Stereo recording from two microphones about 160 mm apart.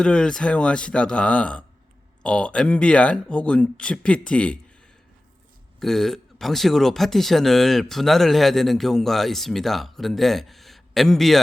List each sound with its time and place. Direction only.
0.0 s speech: 5° left (ahead or behind)
5.8 s speech: centre (ahead or behind)